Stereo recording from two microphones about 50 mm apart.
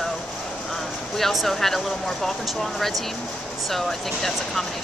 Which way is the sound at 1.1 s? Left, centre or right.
Centre.